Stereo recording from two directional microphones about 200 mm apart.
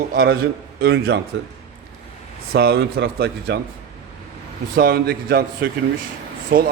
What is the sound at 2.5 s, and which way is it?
Speech, 50° right (ahead or behind).